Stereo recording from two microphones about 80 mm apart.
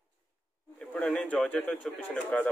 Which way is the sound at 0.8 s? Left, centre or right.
Centre.